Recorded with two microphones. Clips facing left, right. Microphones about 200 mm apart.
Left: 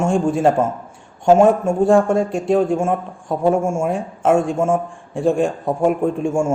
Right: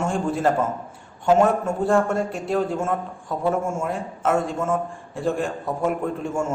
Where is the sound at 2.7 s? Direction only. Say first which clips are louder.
Left 5 dB; 30° left (ahead or behind).